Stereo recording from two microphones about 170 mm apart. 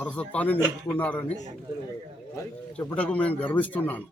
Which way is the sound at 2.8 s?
10° left (ahead or behind).